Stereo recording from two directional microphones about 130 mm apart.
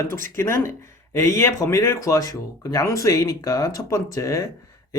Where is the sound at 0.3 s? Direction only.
20° left (ahead or behind).